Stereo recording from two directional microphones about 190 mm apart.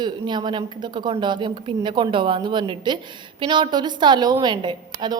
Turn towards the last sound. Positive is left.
turn(degrees=-25)  # may be behind; listen again after turning